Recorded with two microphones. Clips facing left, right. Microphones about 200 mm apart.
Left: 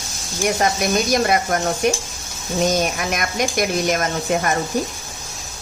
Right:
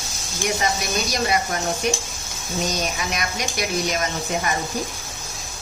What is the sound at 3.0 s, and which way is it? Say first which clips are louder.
Speech: left 5 dB; 50° left (ahead or behind).